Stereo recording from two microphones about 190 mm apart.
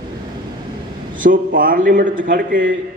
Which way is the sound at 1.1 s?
45° right (ahead or behind).